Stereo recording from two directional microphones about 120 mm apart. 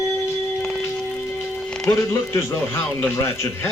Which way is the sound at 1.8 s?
20° left (ahead or behind).